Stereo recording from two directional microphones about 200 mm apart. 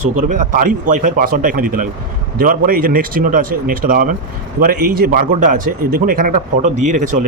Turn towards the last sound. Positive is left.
turn(degrees=-40)  # may be behind; listen again after turning